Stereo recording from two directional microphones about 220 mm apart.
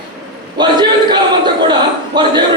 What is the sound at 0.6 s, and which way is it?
A man's voice, 20° right (ahead or behind).